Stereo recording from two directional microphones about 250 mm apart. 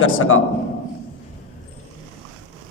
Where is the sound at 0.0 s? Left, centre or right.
Left.